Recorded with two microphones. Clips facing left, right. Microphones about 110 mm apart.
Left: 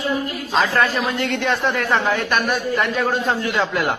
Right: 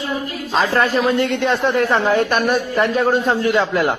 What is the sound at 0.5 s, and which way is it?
Speech, 25° right (ahead or behind).